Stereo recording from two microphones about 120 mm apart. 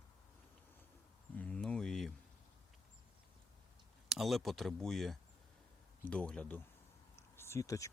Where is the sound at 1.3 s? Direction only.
10° left (ahead or behind).